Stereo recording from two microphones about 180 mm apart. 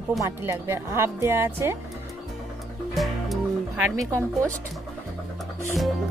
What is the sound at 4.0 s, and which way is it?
Speech, 15° right (ahead or behind).